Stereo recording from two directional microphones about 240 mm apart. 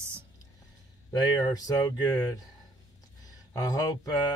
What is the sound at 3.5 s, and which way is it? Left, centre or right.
Speech, centre.